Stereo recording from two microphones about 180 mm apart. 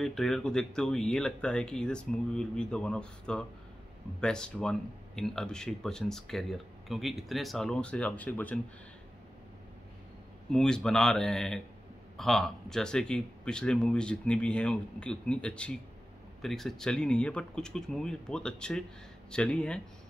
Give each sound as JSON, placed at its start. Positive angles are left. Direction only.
{"t": 0.0, "sound": "speech", "side_deg": 0}
{"t": 10.5, "sound": "speech", "side_deg": 5}